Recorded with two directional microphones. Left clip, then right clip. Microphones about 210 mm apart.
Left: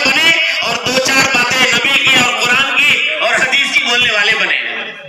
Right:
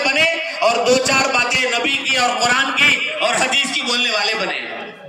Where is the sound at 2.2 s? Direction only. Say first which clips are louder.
Left 4 dB; 20° right (ahead or behind).